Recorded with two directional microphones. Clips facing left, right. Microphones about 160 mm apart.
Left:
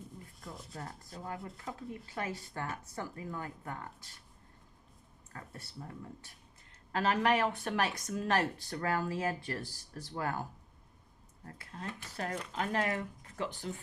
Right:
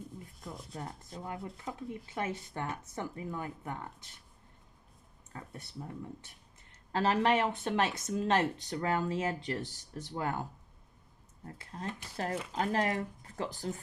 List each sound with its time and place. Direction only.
0.7 s speech: 20° right (ahead or behind)
6.9 s speech: 30° right (ahead or behind)
11.4 s speech: 30° right (ahead or behind)